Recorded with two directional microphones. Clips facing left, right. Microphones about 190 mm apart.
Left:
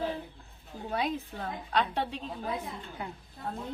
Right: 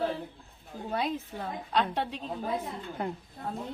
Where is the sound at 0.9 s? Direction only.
Centre (ahead or behind).